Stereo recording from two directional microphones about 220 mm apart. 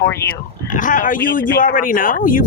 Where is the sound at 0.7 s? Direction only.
35° left (ahead or behind).